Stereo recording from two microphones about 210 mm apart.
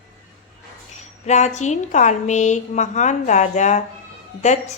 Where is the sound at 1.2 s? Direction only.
35° left (ahead or behind).